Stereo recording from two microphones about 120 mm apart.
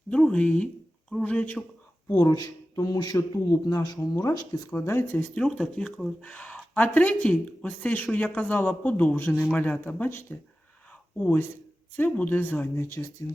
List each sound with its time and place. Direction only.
0.1 s speech: 10° left (ahead or behind)
2.1 s a man's voice: 30° left (ahead or behind)
4.7 s speech: 20° left (ahead or behind)